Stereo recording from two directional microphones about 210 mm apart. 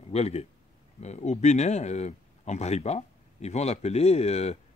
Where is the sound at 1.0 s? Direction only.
30° left (ahead or behind).